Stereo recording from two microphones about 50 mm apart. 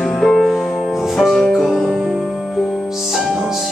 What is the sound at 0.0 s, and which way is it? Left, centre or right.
Music, centre.